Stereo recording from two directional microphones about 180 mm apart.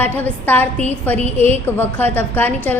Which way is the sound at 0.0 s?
10° left (ahead or behind).